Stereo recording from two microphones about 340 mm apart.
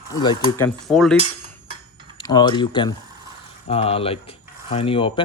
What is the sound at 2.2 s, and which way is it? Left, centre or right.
Speech, centre.